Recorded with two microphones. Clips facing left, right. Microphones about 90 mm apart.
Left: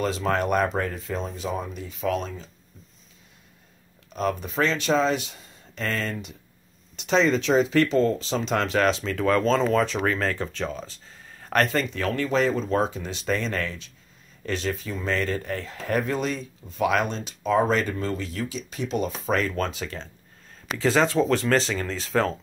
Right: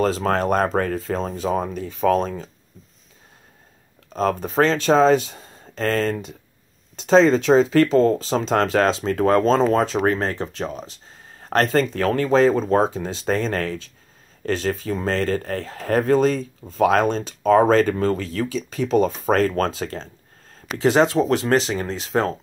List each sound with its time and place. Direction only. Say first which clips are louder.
0.2 s speech: right 3 dB; 40° right (ahead or behind)
0.7 s speech: right 6 dB; 55° right (ahead or behind)
1.6 s speech: right 8 dB; 55° right (ahead or behind)
4.1 s speech: right 5 dB; 40° right (ahead or behind)
8.0 s speech: right 5 dB; 50° right (ahead or behind)
8.8 s speech: right 4 dB; 35° right (ahead or behind)
10.7 s speech: right 2 dB; 15° right (ahead or behind)
11.3 s speech: right 4 dB; 30° right (ahead or behind)
12.4 s speech: right 6 dB; 45° right (ahead or behind)
12.9 s speech: right 5 dB; 30° right (ahead or behind)
17.5 s speech: right 7 dB; 55° right (ahead or behind); by 20.1 s 35° right (ahead or behind)
20.8 s speech: right 4 dB; 25° right (ahead or behind)